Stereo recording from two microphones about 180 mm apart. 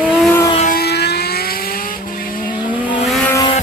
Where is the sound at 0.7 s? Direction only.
65° left (ahead or behind).